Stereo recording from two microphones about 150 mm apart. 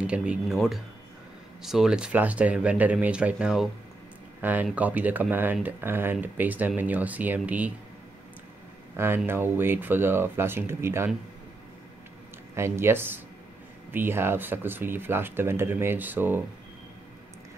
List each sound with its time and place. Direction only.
0.0 s speech: 5° right (ahead or behind)
8.9 s speech: 15° right (ahead or behind)
12.5 s speech: 15° right (ahead or behind)